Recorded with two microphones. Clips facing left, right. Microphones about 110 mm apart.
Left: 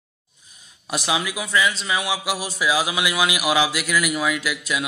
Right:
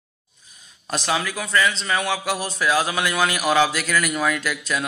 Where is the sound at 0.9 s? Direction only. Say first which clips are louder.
Even; 10° left (ahead or behind).